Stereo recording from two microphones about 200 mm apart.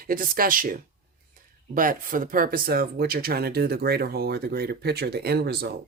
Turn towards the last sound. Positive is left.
turn(degrees=-55)  # may be behind; listen again after turning